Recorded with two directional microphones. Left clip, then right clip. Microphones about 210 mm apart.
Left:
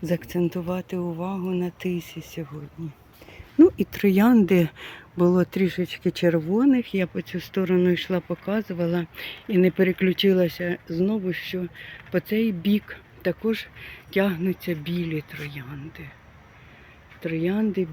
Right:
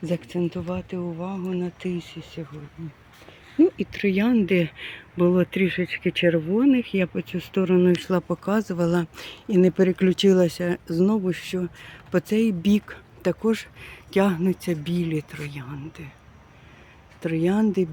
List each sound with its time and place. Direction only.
0.0 s speech: 5° left (ahead or behind)
3.6 s speech: 25° left (ahead or behind)
5.1 s speech: 5° left (ahead or behind); by 16.0 s 15° right (ahead or behind)
17.2 s speech: 15° right (ahead or behind)